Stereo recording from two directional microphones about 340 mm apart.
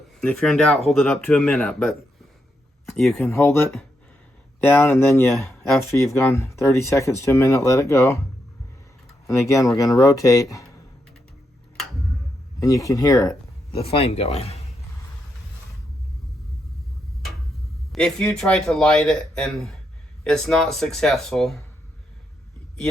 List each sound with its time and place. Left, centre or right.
0.2 s speech: centre
9.2 s speech: centre
12.5 s speech: centre
17.9 s speech: centre